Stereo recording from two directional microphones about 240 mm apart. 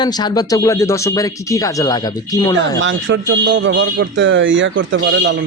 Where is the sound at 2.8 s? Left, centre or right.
Right.